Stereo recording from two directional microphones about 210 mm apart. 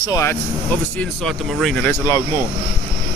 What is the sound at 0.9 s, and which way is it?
Speech, centre (ahead or behind).